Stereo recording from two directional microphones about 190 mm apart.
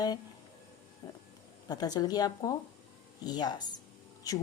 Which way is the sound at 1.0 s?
25° left (ahead or behind).